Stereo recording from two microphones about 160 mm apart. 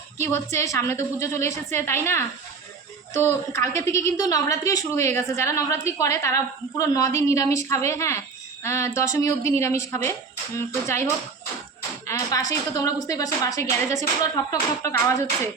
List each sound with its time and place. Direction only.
0.2 s a woman's voice: 15° left (ahead or behind)
12.5 s a woman's voice: 20° left (ahead or behind)